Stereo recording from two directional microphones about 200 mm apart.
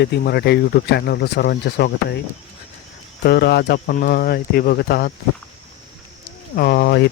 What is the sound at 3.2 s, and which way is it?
Speech, 55° left (ahead or behind).